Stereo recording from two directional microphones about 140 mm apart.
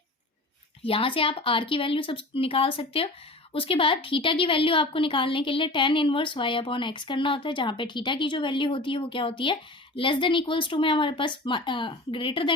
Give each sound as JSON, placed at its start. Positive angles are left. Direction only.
{"t": 0.9, "sound": "a woman's voice", "side_deg": 40}